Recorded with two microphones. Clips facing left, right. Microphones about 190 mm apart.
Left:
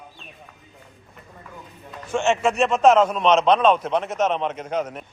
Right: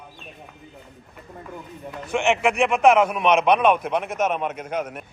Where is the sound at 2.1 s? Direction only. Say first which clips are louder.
Even; 15° right (ahead or behind).